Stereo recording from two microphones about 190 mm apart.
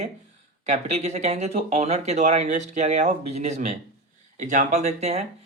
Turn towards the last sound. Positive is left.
turn(degrees=-35)  # may be behind; listen again after turning